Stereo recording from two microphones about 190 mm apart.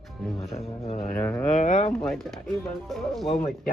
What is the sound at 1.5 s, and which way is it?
Speech, 40° left (ahead or behind).